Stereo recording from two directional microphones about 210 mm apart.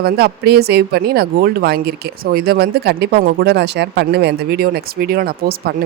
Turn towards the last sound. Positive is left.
turn(degrees=-45)  # may be behind; listen again after turning